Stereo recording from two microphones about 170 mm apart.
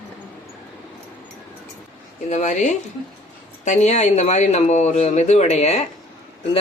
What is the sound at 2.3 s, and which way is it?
Speech, 40° left (ahead or behind).